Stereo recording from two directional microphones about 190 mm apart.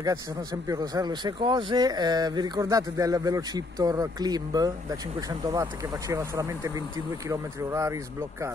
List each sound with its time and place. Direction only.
0.5 s speech: 20° right (ahead or behind)